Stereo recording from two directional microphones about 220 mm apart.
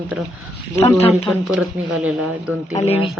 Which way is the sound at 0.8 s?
30° left (ahead or behind).